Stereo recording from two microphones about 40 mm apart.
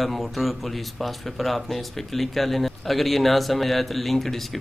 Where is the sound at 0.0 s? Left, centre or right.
Centre.